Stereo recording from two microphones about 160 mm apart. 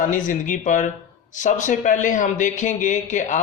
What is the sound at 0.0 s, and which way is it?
Speech, 55° left (ahead or behind).